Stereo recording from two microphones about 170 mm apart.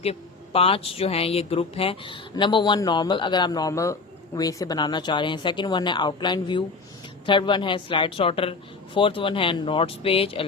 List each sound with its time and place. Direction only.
0.0 s speech: 35° left (ahead or behind)